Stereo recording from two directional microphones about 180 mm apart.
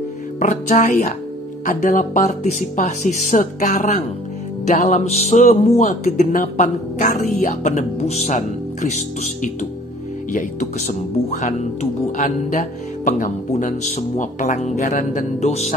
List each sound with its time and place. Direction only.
0.4 s speech: 40° left (ahead or behind)